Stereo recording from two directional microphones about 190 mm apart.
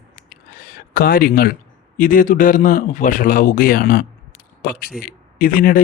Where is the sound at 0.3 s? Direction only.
50° left (ahead or behind).